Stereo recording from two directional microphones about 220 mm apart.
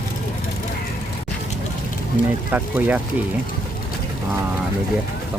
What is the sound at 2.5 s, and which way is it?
Speech, 10° right (ahead or behind).